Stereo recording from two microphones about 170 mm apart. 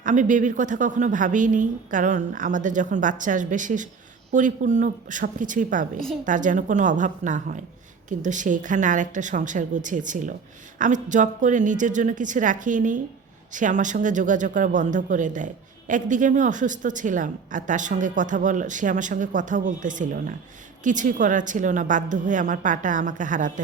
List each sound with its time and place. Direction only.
0.0 s a woman's voice: 50° right (ahead or behind)